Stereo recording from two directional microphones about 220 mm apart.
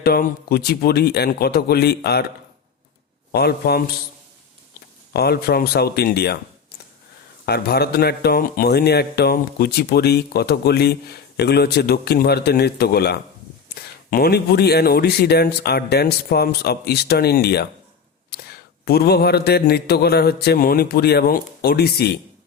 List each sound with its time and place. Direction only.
0.0 s a man's voice: 45° left (ahead or behind)
3.3 s a man's voice: 45° left (ahead or behind)
5.1 s a man's voice: 45° left (ahead or behind)
7.4 s a man's voice: 45° left (ahead or behind)